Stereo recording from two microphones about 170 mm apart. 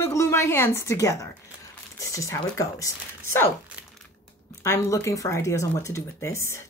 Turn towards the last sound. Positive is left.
turn(degrees=15)  # may be behind; listen again after turning